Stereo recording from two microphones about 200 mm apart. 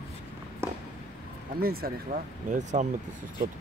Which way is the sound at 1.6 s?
50° right (ahead or behind).